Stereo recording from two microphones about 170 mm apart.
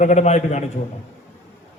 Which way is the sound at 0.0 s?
40° left (ahead or behind).